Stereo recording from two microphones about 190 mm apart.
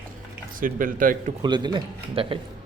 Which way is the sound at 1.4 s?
25° right (ahead or behind).